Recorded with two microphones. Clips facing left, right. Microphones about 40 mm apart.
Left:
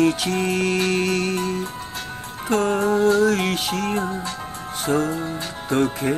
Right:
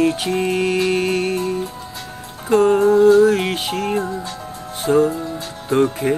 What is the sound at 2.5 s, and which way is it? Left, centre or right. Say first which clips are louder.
Music: right 6 dB; right.